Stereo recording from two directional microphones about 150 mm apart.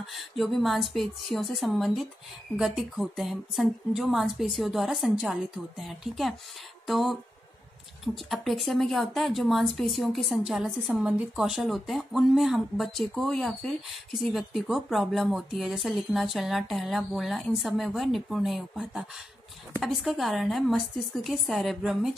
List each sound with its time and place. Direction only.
0.0 s speech: centre (ahead or behind)